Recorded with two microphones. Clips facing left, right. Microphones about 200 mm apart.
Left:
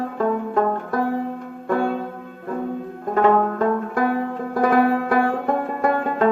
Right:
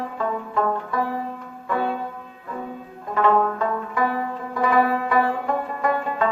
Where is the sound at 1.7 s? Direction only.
50° left (ahead or behind).